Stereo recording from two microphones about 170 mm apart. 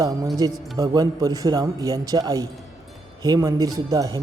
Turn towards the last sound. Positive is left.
turn(degrees=-20)  # may be behind; listen again after turning